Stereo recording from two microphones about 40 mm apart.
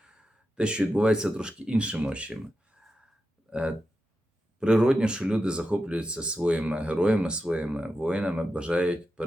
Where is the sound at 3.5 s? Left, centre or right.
Right.